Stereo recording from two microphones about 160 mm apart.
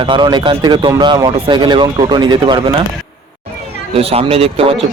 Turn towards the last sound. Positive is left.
turn(degrees=-35)  # may be behind; listen again after turning